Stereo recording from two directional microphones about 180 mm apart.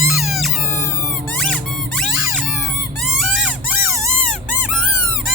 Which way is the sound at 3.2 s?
5° right (ahead or behind).